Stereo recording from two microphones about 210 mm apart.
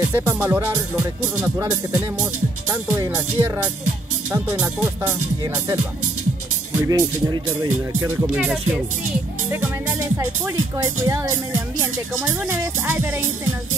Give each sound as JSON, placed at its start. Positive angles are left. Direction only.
{"t": 0.1, "sound": "speech", "side_deg": -10}
{"t": 6.8, "sound": "speech", "side_deg": -15}
{"t": 12.8, "sound": "speech", "side_deg": -10}